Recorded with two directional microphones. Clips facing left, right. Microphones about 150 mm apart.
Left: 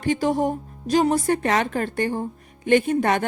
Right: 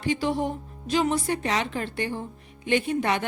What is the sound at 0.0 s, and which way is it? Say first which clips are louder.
A woman's voice: left 4 dB; 45° left (ahead or behind).